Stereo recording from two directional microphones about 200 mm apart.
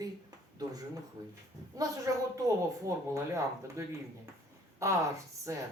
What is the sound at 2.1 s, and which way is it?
Speech, 15° right (ahead or behind).